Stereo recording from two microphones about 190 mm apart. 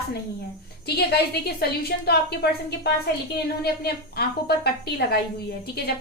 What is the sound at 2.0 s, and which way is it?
A woman's voice, 60° left (ahead or behind).